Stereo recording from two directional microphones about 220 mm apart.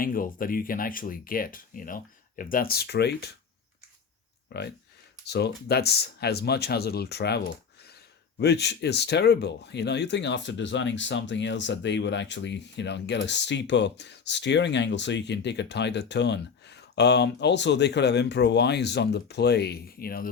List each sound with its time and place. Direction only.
0.0 s speech: 40° left (ahead or behind)
5.2 s speech: 50° left (ahead or behind)